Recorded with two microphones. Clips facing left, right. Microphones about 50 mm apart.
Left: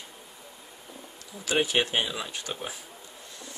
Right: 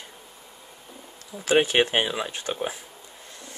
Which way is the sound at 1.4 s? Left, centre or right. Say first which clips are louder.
Right 5 dB; right.